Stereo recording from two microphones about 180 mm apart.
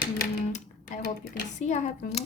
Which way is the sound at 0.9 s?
55° left (ahead or behind).